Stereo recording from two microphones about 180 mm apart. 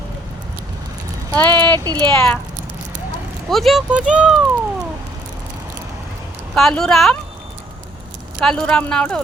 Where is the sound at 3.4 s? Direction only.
Centre (ahead or behind).